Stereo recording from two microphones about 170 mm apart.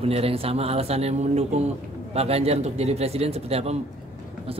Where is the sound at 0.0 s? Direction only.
35° right (ahead or behind).